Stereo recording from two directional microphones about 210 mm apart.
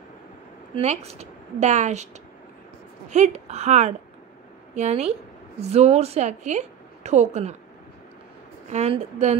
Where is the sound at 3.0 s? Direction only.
35° right (ahead or behind).